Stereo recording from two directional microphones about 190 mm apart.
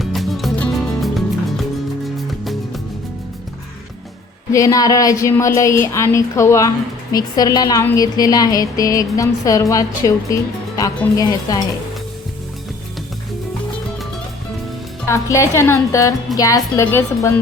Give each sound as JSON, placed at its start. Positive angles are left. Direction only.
{"t": 0.0, "sound": "music", "side_deg": 0}
{"t": 4.5, "sound": "a woman's voice", "side_deg": 15}
{"t": 15.0, "sound": "a woman's voice", "side_deg": 15}